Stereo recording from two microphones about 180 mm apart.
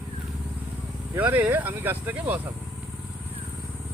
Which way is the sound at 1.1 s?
10° right (ahead or behind).